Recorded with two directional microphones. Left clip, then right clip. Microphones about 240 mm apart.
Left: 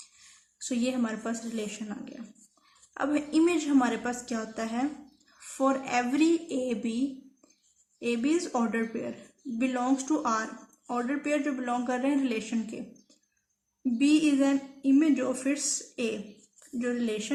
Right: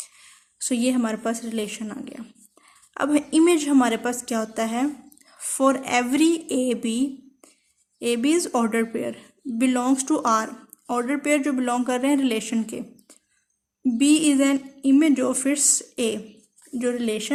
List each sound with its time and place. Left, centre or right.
0.6 s a woman's voice: right